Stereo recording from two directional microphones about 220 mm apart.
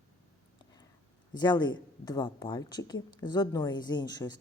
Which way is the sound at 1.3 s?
20° left (ahead or behind).